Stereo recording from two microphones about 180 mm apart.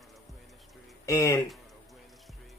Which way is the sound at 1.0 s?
15° left (ahead or behind).